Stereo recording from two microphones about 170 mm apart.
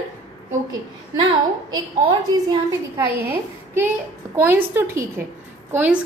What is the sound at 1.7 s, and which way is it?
A woman's voice, 25° right (ahead or behind).